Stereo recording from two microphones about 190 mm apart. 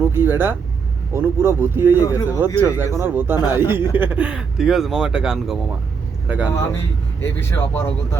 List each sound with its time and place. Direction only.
0.0 s speech: 10° right (ahead or behind)
2.0 s a man's voice: 15° left (ahead or behind)
2.6 s speech: 10° right (ahead or behind)
6.5 s a man's voice: 15° left (ahead or behind)